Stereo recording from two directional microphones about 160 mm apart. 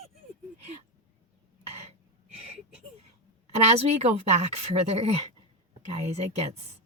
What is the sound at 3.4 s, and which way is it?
Speech, 40° right (ahead or behind).